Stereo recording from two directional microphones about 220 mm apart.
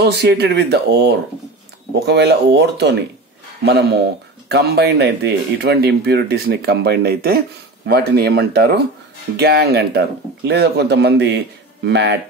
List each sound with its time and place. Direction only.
0.0 s speech: 50° right (ahead or behind)